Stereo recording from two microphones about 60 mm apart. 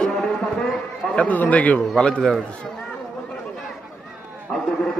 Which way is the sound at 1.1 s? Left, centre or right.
Left.